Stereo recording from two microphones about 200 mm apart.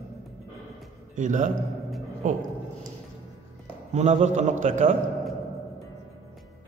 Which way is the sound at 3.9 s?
35° right (ahead or behind).